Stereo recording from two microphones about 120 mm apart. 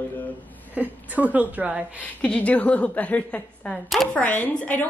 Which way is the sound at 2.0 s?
10° left (ahead or behind).